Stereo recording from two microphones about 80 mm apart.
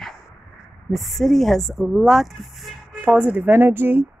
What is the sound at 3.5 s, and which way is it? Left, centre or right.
Speech, right.